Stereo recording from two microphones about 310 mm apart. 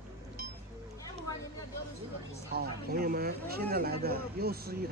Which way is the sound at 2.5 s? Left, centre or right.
Right.